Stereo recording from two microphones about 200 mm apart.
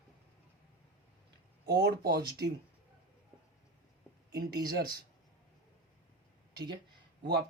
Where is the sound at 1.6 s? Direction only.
50° right (ahead or behind).